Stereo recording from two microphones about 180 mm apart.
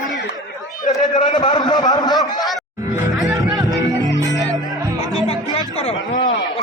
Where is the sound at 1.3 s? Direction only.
25° left (ahead or behind).